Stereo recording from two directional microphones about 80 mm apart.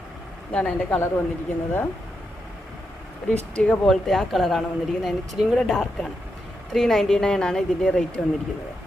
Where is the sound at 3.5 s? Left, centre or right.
Centre.